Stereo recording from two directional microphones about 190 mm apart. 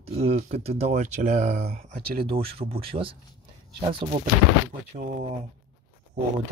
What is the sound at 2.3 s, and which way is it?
Speech, 30° right (ahead or behind).